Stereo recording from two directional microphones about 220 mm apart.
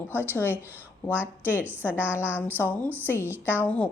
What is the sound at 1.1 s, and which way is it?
A woman's voice, 5° right (ahead or behind).